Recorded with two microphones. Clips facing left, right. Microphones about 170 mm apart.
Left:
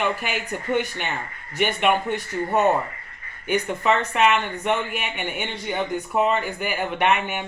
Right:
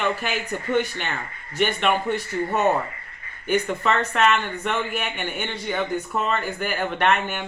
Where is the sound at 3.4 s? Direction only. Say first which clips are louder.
Even; 15° left (ahead or behind).